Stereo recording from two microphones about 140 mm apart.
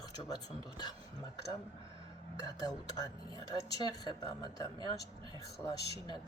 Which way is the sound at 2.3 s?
25° left (ahead or behind).